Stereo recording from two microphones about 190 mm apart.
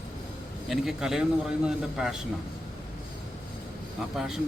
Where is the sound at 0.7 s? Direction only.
Centre (ahead or behind).